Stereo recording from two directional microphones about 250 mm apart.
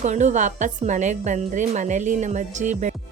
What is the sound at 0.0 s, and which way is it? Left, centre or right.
A woman's voice, right.